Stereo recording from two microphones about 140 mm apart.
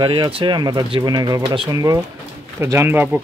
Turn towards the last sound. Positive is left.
turn(degrees=-15)  # may be behind; listen again after turning